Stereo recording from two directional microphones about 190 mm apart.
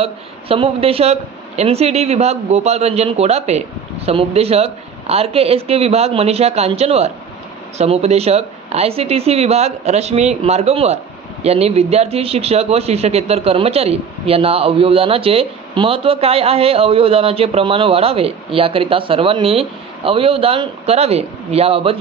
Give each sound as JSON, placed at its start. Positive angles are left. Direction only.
{"t": 0.0, "sound": "a man's voice", "side_deg": -30}